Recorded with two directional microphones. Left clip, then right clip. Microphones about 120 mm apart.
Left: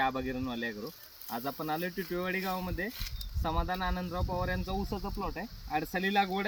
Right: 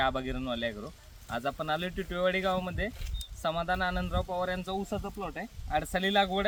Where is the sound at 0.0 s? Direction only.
30° right (ahead or behind).